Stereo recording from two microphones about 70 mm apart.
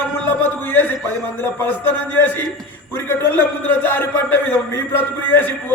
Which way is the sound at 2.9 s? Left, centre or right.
Left.